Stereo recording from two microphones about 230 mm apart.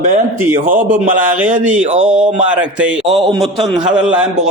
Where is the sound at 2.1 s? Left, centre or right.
Centre.